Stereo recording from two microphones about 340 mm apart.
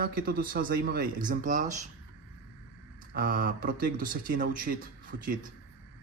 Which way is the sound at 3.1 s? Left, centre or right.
Right.